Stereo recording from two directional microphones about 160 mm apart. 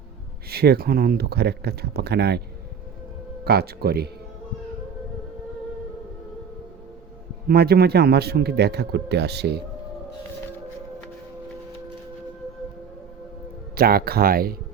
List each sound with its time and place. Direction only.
0.5 s a man's voice: 80° right
3.4 s speech: 90° right
7.4 s a man's voice: 75° right (ahead or behind)
13.7 s speech: 70° right (ahead or behind)